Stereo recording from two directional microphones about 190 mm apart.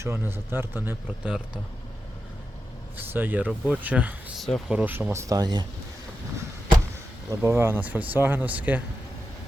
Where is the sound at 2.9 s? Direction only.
10° right (ahead or behind).